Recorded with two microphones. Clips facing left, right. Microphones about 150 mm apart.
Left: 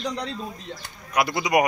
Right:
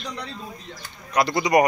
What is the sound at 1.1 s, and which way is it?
Speech, 5° left (ahead or behind).